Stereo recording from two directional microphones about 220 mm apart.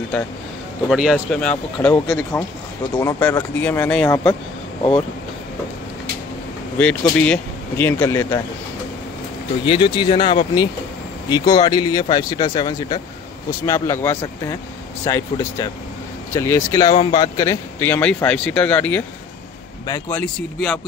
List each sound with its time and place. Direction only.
0.8 s speech: 5° right (ahead or behind); by 4.4 s 10° left (ahead or behind)
6.8 s speech: 5° left (ahead or behind)
9.7 s speech: 20° left (ahead or behind)